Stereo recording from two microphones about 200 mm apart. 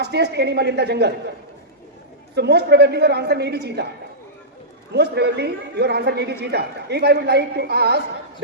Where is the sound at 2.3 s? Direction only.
55° right (ahead or behind).